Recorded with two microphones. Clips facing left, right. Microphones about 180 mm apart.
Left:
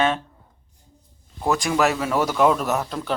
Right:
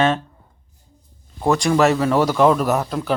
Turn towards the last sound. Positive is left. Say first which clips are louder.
# right 4 dB
turn(degrees=0)  # may be behind; listen again after turning